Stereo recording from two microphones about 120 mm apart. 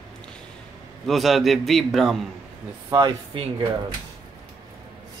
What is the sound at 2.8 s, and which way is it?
Speech, 25° right (ahead or behind).